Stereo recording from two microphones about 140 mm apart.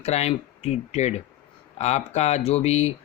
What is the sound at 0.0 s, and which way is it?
Speech, 50° left (ahead or behind).